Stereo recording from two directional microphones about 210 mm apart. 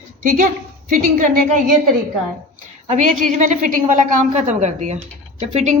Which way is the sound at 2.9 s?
35° right (ahead or behind).